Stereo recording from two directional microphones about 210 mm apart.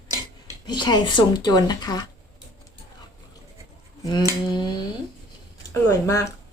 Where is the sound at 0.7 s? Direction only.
20° left (ahead or behind).